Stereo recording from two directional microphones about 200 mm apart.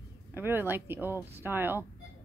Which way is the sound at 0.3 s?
10° right (ahead or behind).